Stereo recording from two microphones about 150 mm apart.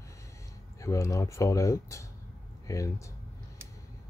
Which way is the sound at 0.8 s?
20° left (ahead or behind).